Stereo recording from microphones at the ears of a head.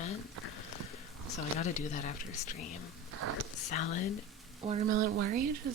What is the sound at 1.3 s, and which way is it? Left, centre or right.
Speech, left.